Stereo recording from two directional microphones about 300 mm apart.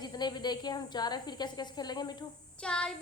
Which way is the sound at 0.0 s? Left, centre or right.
Centre.